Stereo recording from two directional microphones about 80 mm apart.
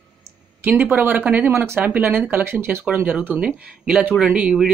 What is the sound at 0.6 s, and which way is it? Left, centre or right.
Speech, right.